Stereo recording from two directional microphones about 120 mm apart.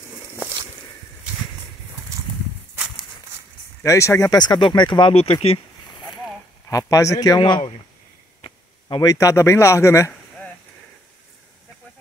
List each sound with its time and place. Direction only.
3.8 s speech: 25° left (ahead or behind); by 5.1 s 40° left (ahead or behind)
5.1 s speech: 55° left (ahead or behind)
6.7 s speech: 30° left (ahead or behind)